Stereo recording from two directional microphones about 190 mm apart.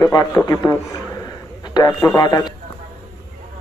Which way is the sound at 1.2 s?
20° left (ahead or behind).